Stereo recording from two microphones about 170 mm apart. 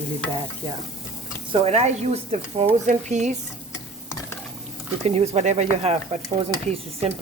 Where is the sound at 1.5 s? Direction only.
40° right (ahead or behind).